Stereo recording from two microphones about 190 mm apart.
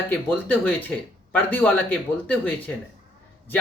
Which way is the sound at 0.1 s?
10° left (ahead or behind).